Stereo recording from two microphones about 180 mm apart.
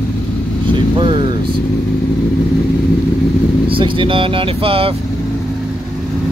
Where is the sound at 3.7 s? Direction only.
30° right (ahead or behind).